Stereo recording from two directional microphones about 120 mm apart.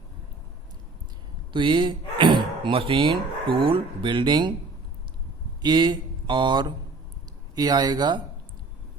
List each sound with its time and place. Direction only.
1.5 s speech: 40° right (ahead or behind)
5.6 s speech: 40° right (ahead or behind)